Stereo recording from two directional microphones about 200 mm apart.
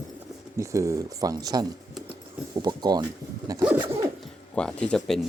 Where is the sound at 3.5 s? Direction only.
20° right (ahead or behind).